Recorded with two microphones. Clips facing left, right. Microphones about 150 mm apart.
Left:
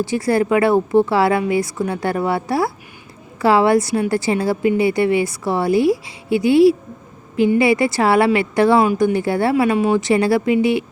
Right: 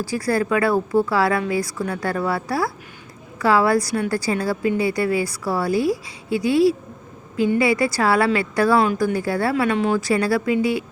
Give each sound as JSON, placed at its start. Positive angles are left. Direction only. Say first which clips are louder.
{"t": 0.0, "sound": "speech", "louder": "left 4 dB", "side_deg": 25}
{"t": 9.6, "sound": "speech", "louder": "left 3 dB", "side_deg": 10}
{"t": 9.9, "sound": "speech", "louder": "left 4 dB", "side_deg": 20}